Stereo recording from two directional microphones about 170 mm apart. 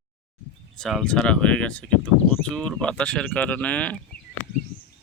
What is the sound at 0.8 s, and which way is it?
Speech, centre (ahead or behind).